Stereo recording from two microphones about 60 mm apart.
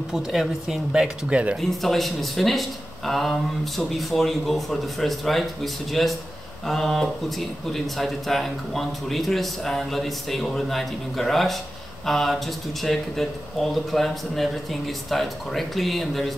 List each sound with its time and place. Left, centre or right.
0.1 s speech: centre
1.3 s speech: right
1.6 s speech: centre